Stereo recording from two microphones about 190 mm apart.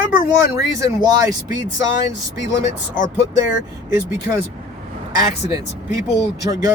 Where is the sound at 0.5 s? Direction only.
20° right (ahead or behind).